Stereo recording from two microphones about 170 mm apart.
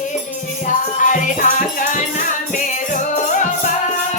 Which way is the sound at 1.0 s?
50° left (ahead or behind).